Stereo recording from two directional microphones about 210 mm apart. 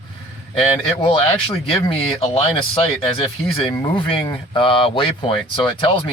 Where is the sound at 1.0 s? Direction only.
25° left (ahead or behind).